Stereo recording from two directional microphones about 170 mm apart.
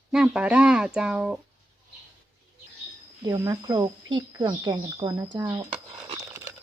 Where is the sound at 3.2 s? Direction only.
20° right (ahead or behind).